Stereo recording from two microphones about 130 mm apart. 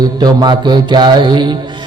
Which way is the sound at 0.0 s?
30° right (ahead or behind).